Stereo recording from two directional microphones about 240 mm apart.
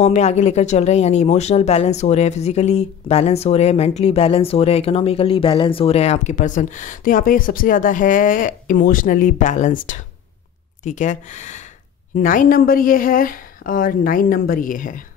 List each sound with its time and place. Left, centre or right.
0.0 s a woman's voice: left